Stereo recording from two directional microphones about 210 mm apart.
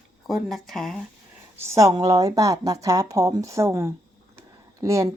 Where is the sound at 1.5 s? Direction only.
15° right (ahead or behind).